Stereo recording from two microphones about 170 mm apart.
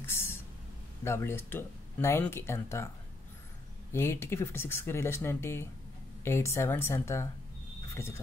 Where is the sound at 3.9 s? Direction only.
15° left (ahead or behind).